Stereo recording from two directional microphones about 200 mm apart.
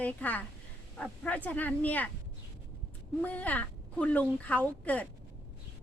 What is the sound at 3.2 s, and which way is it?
A woman's voice, 10° left (ahead or behind).